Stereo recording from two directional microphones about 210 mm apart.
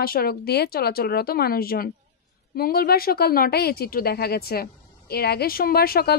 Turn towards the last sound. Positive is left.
turn(degrees=45)  # may be behind; listen again after turning